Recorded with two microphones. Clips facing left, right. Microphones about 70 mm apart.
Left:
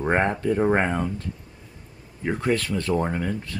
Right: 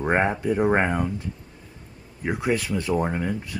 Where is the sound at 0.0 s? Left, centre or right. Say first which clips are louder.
Even; centre.